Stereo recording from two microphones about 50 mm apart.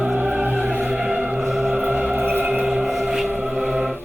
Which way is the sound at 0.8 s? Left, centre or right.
Centre.